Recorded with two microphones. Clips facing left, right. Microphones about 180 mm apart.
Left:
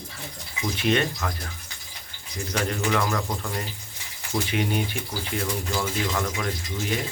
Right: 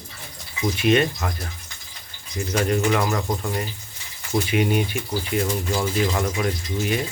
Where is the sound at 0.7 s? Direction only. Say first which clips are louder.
Right 4 dB; 10° right (ahead or behind).